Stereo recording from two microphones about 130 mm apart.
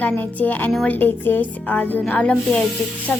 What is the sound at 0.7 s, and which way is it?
Speech, 5° left (ahead or behind).